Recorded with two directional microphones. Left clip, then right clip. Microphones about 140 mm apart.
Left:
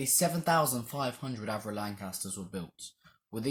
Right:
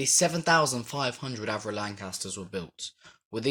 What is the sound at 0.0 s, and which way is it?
Speech, 30° right (ahead or behind).